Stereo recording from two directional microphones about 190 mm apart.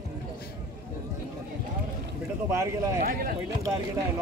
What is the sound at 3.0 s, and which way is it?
Speech, 55° right (ahead or behind).